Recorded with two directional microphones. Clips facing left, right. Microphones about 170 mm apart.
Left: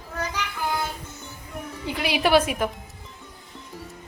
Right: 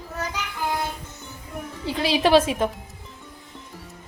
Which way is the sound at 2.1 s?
25° right (ahead or behind).